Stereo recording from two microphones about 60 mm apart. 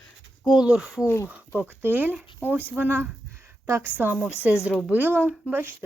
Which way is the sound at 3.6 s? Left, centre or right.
Right.